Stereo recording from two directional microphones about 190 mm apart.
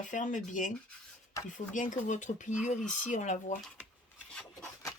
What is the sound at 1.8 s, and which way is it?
Speech, 40° left (ahead or behind).